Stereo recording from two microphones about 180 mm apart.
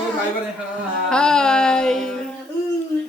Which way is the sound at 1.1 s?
5° left (ahead or behind).